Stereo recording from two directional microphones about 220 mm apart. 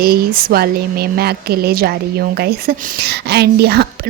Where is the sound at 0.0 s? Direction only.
45° right (ahead or behind).